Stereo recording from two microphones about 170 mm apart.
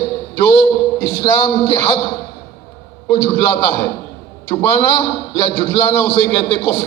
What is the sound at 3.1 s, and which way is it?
Speech, 30° left (ahead or behind).